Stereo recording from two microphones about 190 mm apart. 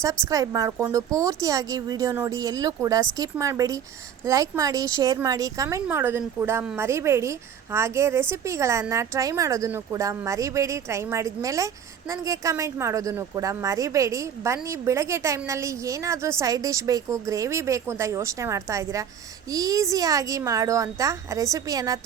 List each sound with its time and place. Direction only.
0.0 s speech: 15° right (ahead or behind)